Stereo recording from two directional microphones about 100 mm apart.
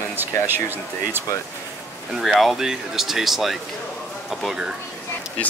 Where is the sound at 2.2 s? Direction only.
Centre (ahead or behind).